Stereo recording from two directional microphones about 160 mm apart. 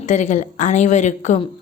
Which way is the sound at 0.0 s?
50° left (ahead or behind).